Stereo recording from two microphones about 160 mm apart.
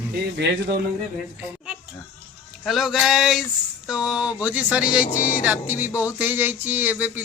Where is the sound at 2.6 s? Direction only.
Centre (ahead or behind).